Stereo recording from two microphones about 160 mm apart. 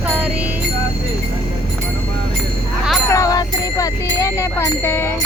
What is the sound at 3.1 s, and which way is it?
Speech, 20° left (ahead or behind).